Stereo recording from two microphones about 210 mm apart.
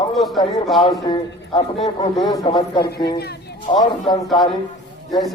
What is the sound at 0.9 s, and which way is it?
A man's voice, 25° left (ahead or behind).